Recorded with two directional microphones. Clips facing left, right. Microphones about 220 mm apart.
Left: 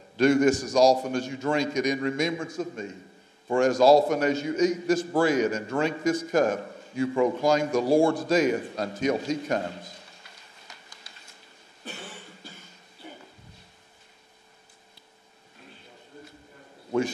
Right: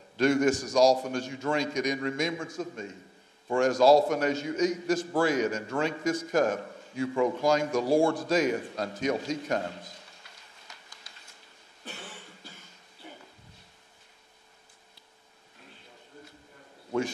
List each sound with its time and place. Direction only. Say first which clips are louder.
0.2 s a man's voice: left 4 dB; 15° left (ahead or behind)
3.8 s a man's voice: left 2 dB; 35° left (ahead or behind)
4.1 s a man's voice: left 3 dB; 15° left (ahead or behind)
7.7 s a man's voice: left 4 dB; 30° left (ahead or behind)
8.3 s a man's voice: left 3 dB; 10° left (ahead or behind)
11.9 s cough: left 3 dB; 15° left (ahead or behind)